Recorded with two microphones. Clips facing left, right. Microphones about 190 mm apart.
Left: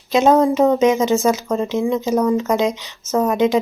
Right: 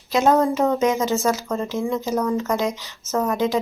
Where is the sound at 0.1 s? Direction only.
20° left (ahead or behind).